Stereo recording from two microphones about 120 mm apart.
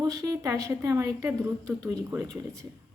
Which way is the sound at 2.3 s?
25° right (ahead or behind).